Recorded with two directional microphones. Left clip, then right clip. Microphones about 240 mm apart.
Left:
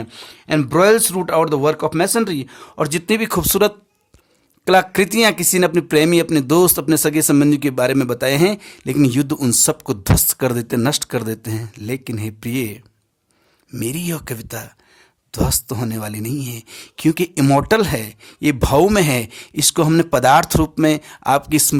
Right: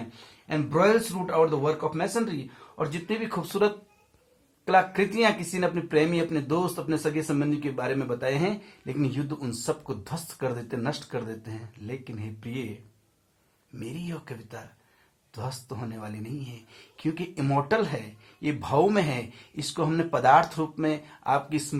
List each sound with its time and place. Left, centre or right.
0.1 s speech: left
13.7 s speech: left